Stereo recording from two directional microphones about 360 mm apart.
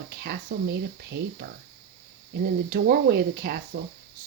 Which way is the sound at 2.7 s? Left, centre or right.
Right.